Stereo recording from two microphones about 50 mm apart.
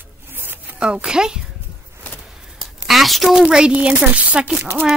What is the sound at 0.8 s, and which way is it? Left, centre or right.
Speech, centre.